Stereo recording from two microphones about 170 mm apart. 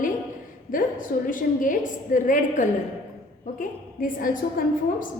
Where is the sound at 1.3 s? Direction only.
50° left (ahead or behind).